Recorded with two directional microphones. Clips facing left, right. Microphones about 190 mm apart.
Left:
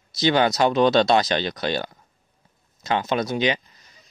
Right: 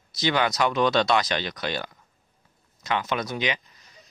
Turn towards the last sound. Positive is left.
turn(degrees=30)  # may be behind; listen again after turning